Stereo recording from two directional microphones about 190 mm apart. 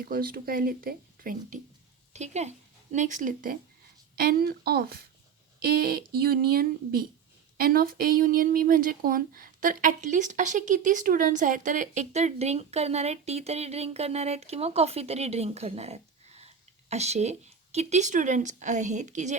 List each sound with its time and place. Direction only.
0.0 s a woman's voice: 50° right (ahead or behind)